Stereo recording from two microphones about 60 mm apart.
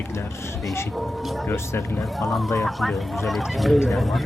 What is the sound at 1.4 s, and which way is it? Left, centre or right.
Speech, left.